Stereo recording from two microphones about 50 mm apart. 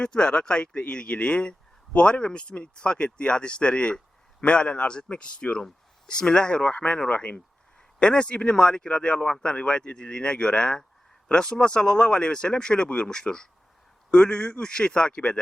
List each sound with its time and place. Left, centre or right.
0.0 s speech: centre